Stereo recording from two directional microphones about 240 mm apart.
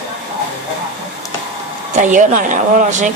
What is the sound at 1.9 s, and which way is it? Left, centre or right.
Speech, right.